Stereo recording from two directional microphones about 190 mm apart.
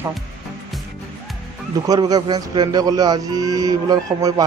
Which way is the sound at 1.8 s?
20° right (ahead or behind).